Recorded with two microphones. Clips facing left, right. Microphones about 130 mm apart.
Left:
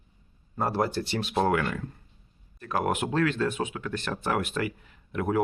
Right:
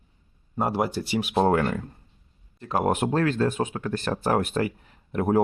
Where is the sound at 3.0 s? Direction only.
40° right (ahead or behind).